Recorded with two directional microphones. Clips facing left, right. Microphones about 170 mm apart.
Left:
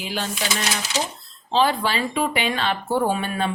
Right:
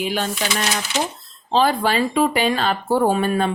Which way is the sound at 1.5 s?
45° right (ahead or behind).